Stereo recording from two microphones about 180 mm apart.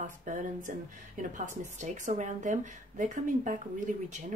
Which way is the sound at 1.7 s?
45° right (ahead or behind).